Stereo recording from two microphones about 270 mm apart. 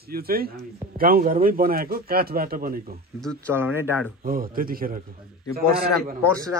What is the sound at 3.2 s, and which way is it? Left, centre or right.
Speech, centre.